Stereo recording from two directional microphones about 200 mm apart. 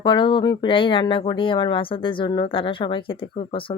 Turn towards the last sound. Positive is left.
turn(degrees=25)  # may be behind; listen again after turning